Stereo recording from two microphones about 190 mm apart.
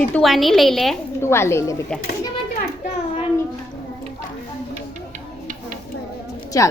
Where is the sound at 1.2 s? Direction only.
15° left (ahead or behind).